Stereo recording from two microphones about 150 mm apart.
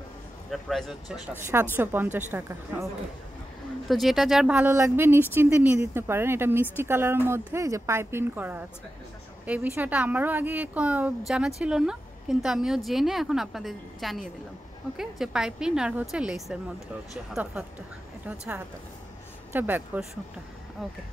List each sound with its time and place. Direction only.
0.5 s speech: centre (ahead or behind)
3.8 s speech: centre (ahead or behind)